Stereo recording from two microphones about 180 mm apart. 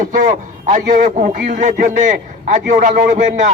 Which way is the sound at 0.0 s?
45° right (ahead or behind).